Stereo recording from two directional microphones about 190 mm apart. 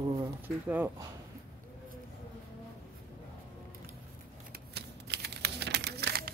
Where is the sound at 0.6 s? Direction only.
10° right (ahead or behind).